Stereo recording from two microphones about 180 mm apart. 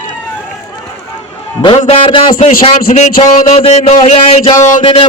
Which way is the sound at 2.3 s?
45° left (ahead or behind).